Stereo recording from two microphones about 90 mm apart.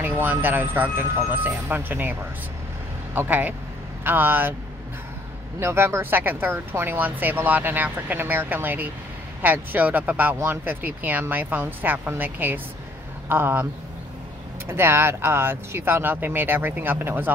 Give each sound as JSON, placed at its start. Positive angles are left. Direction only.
{"t": 0.0, "sound": "speech", "side_deg": -20}
{"t": 3.2, "sound": "speech", "side_deg": -20}
{"t": 5.6, "sound": "speech", "side_deg": -30}
{"t": 14.7, "sound": "speech", "side_deg": -25}